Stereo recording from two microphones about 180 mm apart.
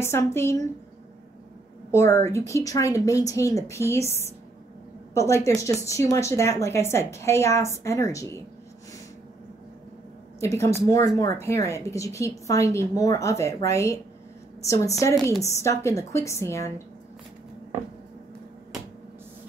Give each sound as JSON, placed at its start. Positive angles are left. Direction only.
{"t": 0.0, "sound": "a woman's voice", "side_deg": 15}
{"t": 1.9, "sound": "a woman's voice", "side_deg": 15}
{"t": 10.4, "sound": "a woman's voice", "side_deg": 15}